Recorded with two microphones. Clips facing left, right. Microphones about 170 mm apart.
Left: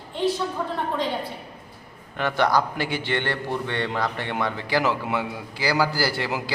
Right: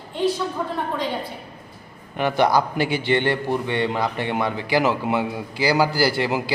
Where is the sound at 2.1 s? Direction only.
15° right (ahead or behind).